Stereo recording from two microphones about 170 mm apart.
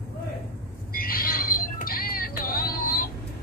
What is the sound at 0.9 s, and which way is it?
Music, 60° left (ahead or behind).